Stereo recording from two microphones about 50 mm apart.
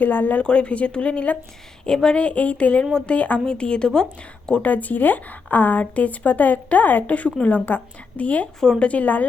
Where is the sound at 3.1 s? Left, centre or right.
Left.